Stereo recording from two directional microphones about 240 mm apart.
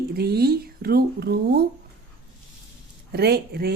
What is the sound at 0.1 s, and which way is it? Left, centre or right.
Speech, right.